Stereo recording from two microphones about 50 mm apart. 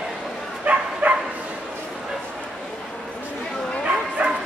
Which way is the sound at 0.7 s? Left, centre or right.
Right.